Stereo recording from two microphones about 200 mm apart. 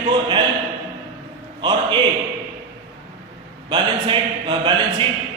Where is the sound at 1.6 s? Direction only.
25° right (ahead or behind).